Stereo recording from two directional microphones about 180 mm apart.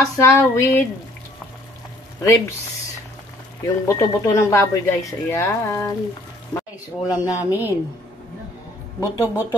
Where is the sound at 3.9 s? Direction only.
15° left (ahead or behind).